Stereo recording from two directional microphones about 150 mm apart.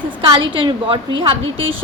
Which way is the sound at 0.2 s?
35° right (ahead or behind).